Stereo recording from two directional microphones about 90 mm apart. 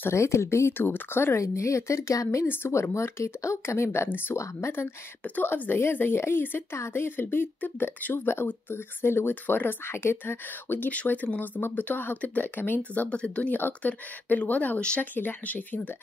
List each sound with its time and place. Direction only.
0.0 s a woman's voice: 30° left (ahead or behind)
5.2 s a woman's voice: 20° left (ahead or behind)